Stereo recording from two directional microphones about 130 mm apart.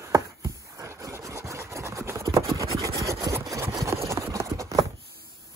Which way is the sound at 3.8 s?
20° right (ahead or behind).